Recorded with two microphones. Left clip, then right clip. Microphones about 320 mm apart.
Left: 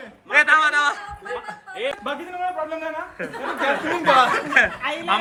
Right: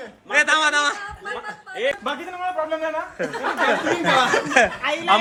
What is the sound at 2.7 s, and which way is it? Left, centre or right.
A man's voice, centre.